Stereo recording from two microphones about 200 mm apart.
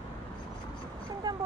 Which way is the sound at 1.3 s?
20° right (ahead or behind).